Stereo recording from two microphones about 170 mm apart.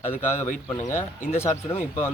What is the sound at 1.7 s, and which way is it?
Speech, 15° left (ahead or behind).